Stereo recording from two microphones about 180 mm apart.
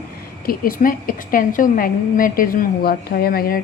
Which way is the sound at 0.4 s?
50° left (ahead or behind).